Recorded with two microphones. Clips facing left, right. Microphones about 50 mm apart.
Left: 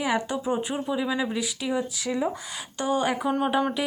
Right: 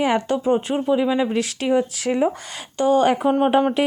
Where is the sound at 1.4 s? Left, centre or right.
Right.